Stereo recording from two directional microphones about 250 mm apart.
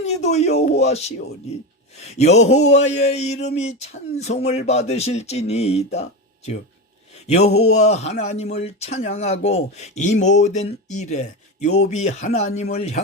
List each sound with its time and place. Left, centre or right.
0.0 s speech: left